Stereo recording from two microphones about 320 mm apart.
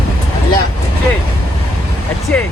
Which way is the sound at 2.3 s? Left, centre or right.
Centre.